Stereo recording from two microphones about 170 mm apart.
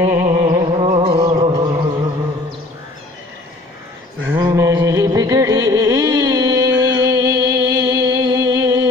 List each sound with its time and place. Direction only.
0.0 s music: 15° right (ahead or behind)
4.4 s music: 20° right (ahead or behind)